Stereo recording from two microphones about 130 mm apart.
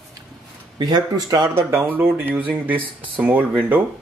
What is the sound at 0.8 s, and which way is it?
Speech, 35° right (ahead or behind).